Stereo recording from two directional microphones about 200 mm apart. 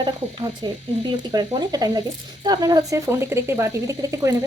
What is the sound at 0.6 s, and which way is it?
Speech, 20° right (ahead or behind).